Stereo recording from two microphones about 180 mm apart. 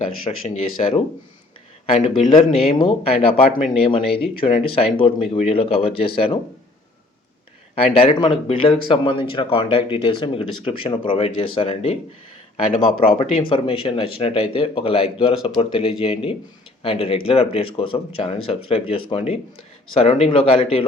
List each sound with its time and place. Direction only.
0.3 s speech: 35° left (ahead or behind)
7.8 s speech: 35° left (ahead or behind)
13.5 s speech: 30° left (ahead or behind)